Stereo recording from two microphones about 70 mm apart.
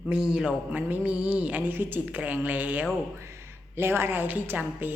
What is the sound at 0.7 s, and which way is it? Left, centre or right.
Speech, right.